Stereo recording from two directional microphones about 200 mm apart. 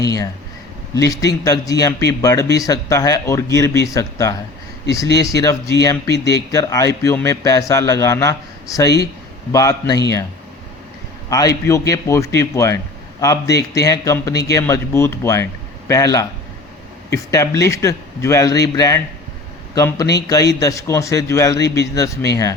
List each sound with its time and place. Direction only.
0.0 s a man's voice: 15° left (ahead or behind)
11.3 s a man's voice: 15° left (ahead or behind)